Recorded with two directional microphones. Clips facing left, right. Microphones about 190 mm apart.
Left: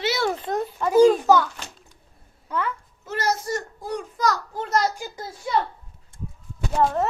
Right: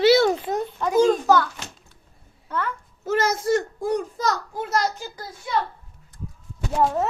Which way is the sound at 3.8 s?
45° right (ahead or behind).